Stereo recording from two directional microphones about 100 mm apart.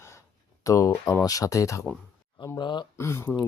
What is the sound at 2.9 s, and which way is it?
Speech, 25° left (ahead or behind).